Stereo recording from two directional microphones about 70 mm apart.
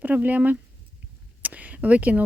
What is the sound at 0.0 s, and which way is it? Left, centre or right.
Speech, right.